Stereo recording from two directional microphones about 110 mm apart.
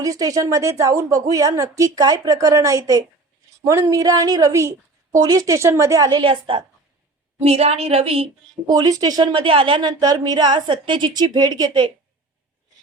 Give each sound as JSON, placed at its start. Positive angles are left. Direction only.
{"t": 0.0, "sound": "a woman's voice", "side_deg": -30}
{"t": 7.3, "sound": "a woman's voice", "side_deg": -70}
{"t": 8.6, "sound": "speech", "side_deg": -35}
{"t": 10.0, "sound": "a woman's voice", "side_deg": -35}